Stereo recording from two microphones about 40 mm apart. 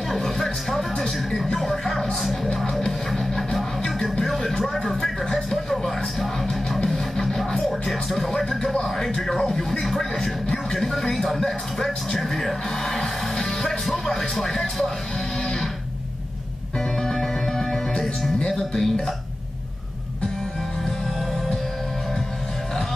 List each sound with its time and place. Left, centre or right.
0.1 s music: centre
3.1 s music: centre
6.8 s music: centre
8.8 s speech: centre
17.0 s music: centre